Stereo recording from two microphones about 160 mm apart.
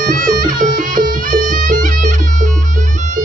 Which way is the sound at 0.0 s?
60° right (ahead or behind).